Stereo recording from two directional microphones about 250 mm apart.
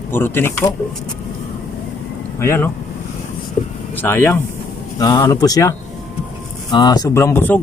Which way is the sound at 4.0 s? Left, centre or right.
Centre.